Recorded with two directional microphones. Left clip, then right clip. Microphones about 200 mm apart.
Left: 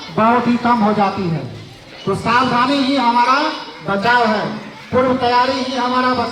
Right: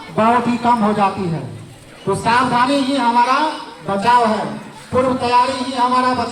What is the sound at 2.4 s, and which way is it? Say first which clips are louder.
A man's voice: left 2 dB; 35° left (ahead or behind).